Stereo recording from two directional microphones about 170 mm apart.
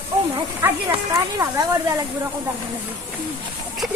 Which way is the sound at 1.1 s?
20° right (ahead or behind).